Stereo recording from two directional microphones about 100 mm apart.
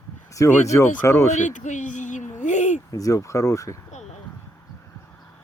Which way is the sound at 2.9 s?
35° left (ahead or behind).